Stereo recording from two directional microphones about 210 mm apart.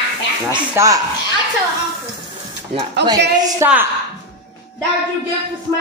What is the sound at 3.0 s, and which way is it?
Speech, 55° right (ahead or behind).